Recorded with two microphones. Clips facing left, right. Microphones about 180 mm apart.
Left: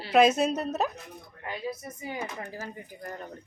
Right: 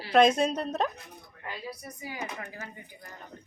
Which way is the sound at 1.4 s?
20° left (ahead or behind).